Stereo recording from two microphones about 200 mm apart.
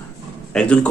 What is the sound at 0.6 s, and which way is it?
Speech, 5° left (ahead or behind).